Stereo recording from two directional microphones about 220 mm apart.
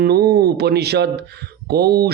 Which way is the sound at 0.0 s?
45° right (ahead or behind).